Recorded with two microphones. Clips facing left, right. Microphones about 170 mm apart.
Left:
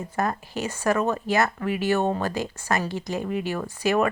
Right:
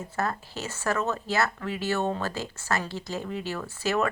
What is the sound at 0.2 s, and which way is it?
Speech, 15° left (ahead or behind).